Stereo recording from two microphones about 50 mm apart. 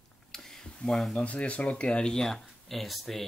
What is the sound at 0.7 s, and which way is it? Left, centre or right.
Speech, centre.